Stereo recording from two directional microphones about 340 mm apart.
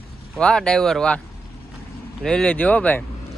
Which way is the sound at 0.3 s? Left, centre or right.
Centre.